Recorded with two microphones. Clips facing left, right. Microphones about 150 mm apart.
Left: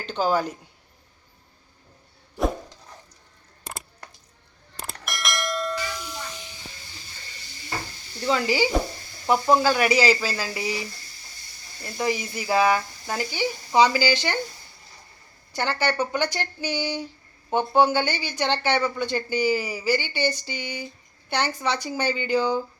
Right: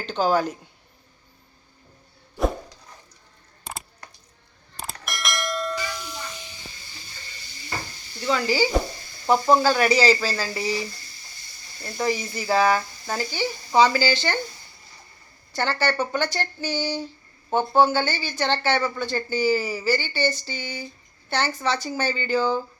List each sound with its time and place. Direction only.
0.2 s speech: 5° left (ahead or behind)
4.8 s bell: centre (ahead or behind)
8.3 s stir: 20° left (ahead or behind)
9.2 s speech: 10° left (ahead or behind)
11.9 s speech: 10° left (ahead or behind)
15.5 s speech: 15° left (ahead or behind)